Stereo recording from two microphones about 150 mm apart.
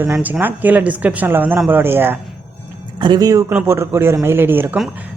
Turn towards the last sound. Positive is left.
turn(degrees=-15)  # may be behind; listen again after turning